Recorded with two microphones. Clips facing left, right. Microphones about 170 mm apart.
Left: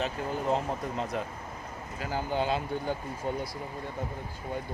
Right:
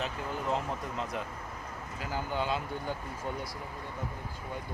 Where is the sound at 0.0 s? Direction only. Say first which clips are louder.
Left 4 dB; 40° left (ahead or behind).